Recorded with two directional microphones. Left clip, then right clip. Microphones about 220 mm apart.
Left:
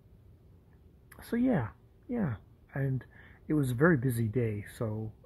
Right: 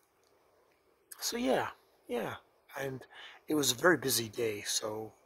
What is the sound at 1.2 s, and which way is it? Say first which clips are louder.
A woman's voice: even; 15° right (ahead or behind).